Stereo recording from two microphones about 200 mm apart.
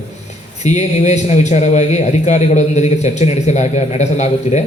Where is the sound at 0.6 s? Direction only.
35° left (ahead or behind).